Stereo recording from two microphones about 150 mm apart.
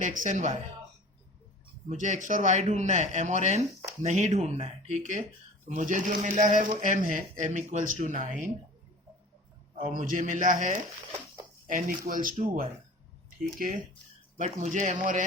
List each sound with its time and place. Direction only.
0.0 s speech: 60° right (ahead or behind)
1.9 s a man's voice: 55° right (ahead or behind)
9.7 s speech: 60° right (ahead or behind)
14.3 s speech: 55° right (ahead or behind)